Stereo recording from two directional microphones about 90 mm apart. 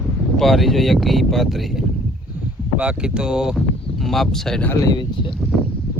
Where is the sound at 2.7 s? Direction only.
10° right (ahead or behind); by 4.6 s 5° left (ahead or behind).